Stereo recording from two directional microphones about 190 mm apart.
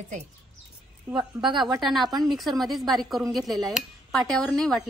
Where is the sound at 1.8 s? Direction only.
Centre (ahead or behind).